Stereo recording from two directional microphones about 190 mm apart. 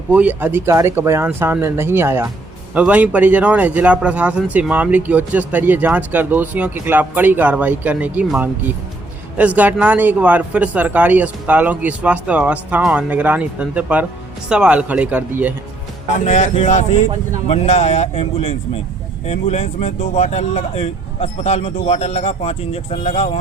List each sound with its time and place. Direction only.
0.1 s speech: 10° right (ahead or behind)
16.1 s speech: 40° left (ahead or behind)